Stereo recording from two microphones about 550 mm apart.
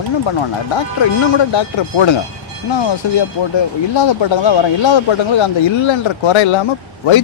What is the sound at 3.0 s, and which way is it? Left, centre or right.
A man's voice, left.